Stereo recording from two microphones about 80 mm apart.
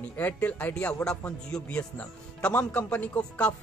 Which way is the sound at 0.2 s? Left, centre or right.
Left.